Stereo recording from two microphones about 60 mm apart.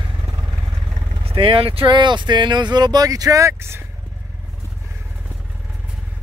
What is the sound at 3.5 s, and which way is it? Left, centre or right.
Speech, right.